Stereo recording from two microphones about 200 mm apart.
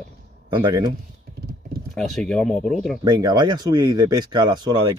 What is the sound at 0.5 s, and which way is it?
Speech, 20° right (ahead or behind).